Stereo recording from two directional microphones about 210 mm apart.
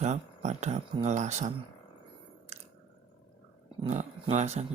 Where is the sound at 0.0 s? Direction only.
35° right (ahead or behind).